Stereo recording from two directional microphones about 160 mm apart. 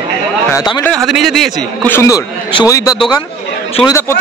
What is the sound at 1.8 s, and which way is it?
A man's voice, 15° left (ahead or behind).